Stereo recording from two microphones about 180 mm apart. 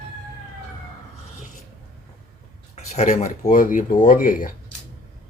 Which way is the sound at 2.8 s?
40° left (ahead or behind).